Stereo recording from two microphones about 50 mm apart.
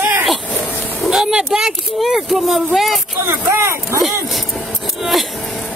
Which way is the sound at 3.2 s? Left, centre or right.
Right.